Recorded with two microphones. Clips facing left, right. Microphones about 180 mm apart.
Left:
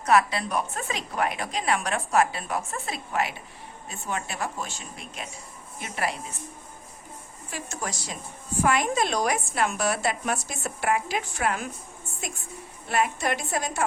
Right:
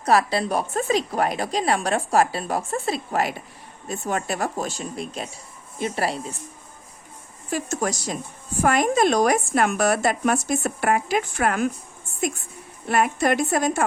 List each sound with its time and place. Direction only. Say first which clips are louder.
0.0 s a woman's voice: right 2 dB; 35° right (ahead or behind)
7.5 s speech: right 9 dB; 45° right (ahead or behind)
12.9 s speech: right 5 dB; 50° right (ahead or behind)